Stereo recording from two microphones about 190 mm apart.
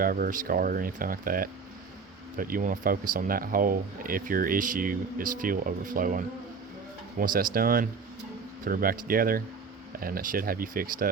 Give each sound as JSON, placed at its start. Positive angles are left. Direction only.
{"t": 0.0, "sound": "speech", "side_deg": -50}